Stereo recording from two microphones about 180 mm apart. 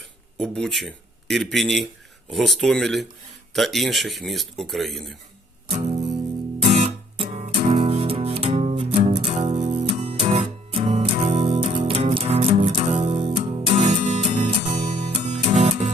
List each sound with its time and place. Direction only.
0.3 s speech: 5° left (ahead or behind)
6.6 s music: 40° right (ahead or behind)